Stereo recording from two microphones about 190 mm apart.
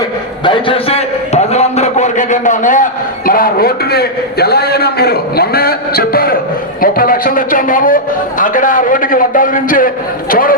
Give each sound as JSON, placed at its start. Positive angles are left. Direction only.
{"t": 0.4, "sound": "a man's voice", "side_deg": 25}